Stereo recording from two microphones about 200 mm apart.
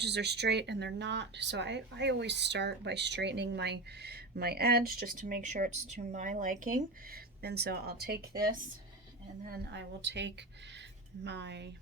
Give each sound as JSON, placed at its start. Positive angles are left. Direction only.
{"t": 0.0, "sound": "speech", "side_deg": -60}
{"t": 9.5, "sound": "speech", "side_deg": -60}